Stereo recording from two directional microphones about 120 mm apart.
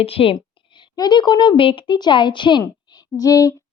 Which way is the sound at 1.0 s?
35° left (ahead or behind).